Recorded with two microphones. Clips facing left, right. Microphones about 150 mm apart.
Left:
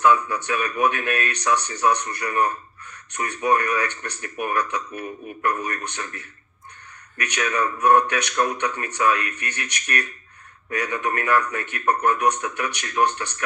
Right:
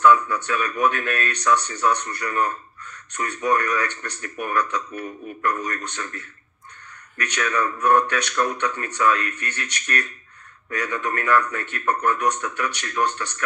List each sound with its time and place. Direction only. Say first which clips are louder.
0.0 s speech: right 2 dB; 15° left (ahead or behind)